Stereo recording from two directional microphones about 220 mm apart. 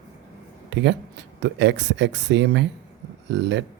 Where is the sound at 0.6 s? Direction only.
50° right (ahead or behind).